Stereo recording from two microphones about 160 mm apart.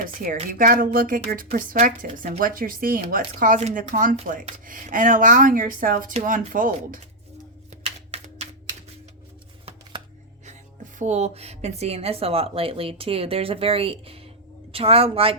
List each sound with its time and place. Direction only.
0.5 s speech: 60° right (ahead or behind)
7.9 s music: 40° right (ahead or behind)
10.9 s speech: 45° right (ahead or behind)